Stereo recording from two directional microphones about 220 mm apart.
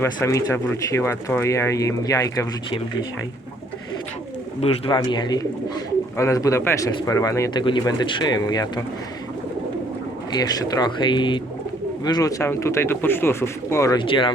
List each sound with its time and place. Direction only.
0.0 s speech: 15° left (ahead or behind)
4.6 s speech: 25° left (ahead or behind)
10.3 s speech: 15° left (ahead or behind)